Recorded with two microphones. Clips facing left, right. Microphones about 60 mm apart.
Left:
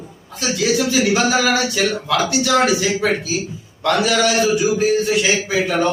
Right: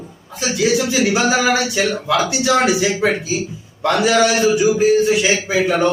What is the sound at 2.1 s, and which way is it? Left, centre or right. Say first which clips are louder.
A man's voice: right 1 dB; centre.